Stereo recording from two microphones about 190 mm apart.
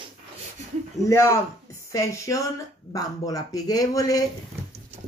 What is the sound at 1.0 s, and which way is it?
Speech, 15° left (ahead or behind).